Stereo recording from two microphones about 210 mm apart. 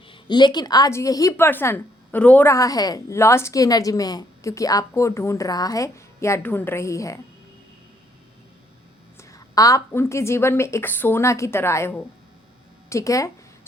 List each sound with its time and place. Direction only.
0.1 s a woman's voice: 20° left (ahead or behind)
9.1 s a woman's voice: 15° left (ahead or behind)